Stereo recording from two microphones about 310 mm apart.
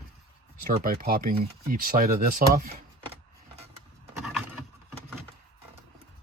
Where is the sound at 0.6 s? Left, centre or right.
Right.